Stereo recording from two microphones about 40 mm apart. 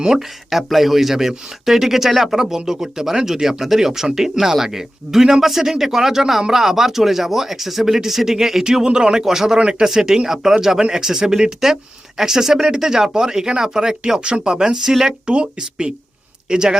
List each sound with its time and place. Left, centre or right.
0.0 s speech: centre
9.6 s speech: right
9.8 s speech: centre